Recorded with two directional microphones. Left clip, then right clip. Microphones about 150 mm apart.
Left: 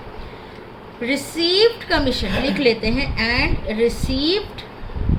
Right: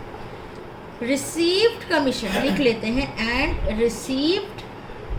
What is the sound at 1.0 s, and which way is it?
A woman's voice, 45° left (ahead or behind).